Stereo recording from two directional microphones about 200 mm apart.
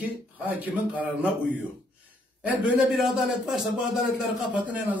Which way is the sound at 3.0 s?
Centre (ahead or behind).